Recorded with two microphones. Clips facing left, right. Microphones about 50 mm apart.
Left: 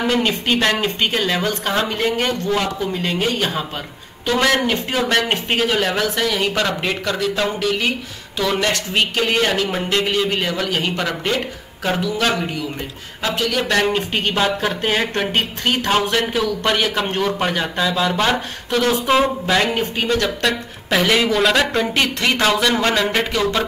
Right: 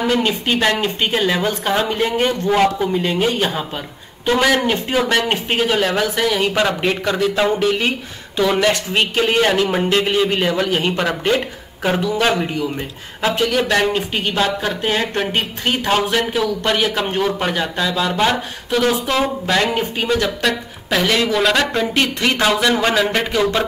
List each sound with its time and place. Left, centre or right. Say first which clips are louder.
0.0 s a man's voice: right 1 dB; centre; by 2.9 s right
2.9 s a man's voice: right 3 dB; centre
7.5 s speech: right 3 dB; right
8.5 s a man's voice: right 2 dB; centre
13.6 s speech: right 1 dB; centre
15.3 s a man's voice: even; centre